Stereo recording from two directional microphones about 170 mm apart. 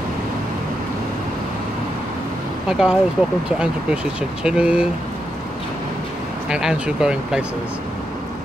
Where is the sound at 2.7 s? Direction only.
5° right (ahead or behind).